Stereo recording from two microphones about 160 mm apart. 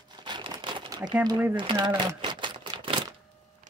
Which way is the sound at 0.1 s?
30° right (ahead or behind).